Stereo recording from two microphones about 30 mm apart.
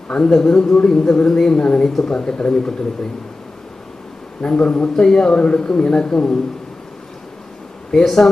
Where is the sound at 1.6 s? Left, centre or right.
Left.